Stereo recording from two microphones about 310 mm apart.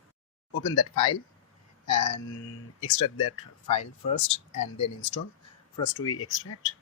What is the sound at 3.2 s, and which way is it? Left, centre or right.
Speech, left.